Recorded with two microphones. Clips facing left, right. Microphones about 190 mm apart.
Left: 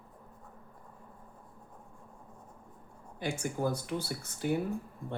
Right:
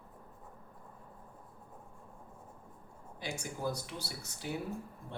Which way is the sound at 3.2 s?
55° left (ahead or behind).